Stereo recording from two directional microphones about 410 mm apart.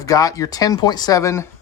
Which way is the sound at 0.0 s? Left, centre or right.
Centre.